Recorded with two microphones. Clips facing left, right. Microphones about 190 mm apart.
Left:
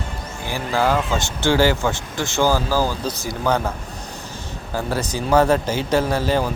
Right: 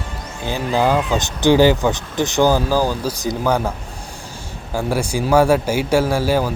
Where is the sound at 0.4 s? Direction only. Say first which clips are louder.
Right 3 dB; 20° right (ahead or behind).